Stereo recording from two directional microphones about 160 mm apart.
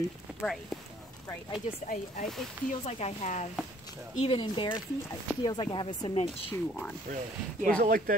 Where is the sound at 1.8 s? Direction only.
55° left (ahead or behind).